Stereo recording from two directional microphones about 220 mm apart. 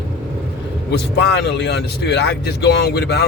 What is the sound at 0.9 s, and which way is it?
Speech, 50° left (ahead or behind).